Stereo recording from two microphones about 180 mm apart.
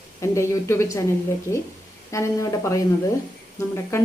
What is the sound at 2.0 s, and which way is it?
Speech, 15° left (ahead or behind).